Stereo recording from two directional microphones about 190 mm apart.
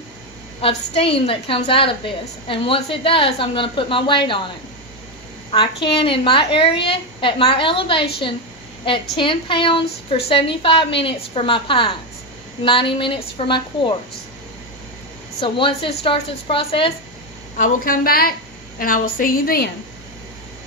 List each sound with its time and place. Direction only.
0.6 s a woman's voice: 30° left (ahead or behind)
5.9 s a woman's voice: 30° left (ahead or behind)
15.4 s a woman's voice: 25° left (ahead or behind)
17.6 s a woman's voice: 45° left (ahead or behind)